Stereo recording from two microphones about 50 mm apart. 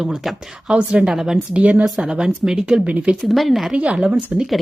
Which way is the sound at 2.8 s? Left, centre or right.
Right.